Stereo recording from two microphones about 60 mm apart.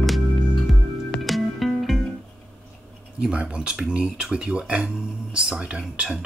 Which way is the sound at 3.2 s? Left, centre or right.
Centre.